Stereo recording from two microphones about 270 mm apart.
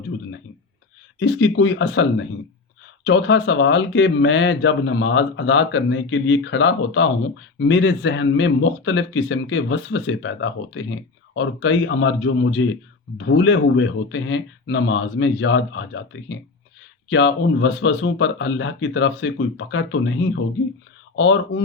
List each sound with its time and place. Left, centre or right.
1.2 s speech: left